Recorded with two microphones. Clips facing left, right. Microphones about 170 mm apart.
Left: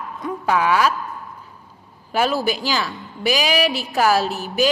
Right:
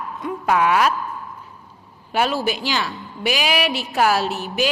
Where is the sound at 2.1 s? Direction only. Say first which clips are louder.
Left 1 dB; 40° left (ahead or behind).